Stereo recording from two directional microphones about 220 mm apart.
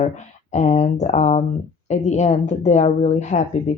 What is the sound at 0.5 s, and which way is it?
Speech, 30° left (ahead or behind).